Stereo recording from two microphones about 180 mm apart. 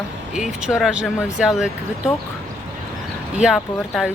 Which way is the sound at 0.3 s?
5° right (ahead or behind).